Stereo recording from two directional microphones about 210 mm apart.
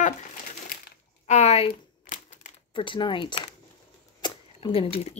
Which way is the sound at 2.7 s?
25° left (ahead or behind).